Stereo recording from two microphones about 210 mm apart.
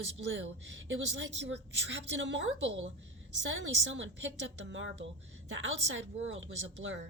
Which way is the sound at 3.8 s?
65° right (ahead or behind).